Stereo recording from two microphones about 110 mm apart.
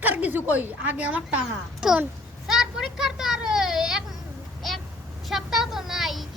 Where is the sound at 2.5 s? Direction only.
5° right (ahead or behind).